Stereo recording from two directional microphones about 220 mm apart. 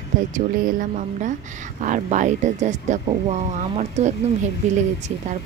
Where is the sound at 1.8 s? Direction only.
35° right (ahead or behind).